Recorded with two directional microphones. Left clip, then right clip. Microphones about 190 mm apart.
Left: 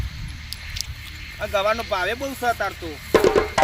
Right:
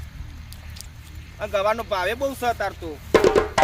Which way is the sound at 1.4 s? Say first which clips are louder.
Left 1 dB; 20° right (ahead or behind).